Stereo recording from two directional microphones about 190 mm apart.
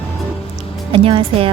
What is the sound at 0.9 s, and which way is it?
Speech, 30° right (ahead or behind).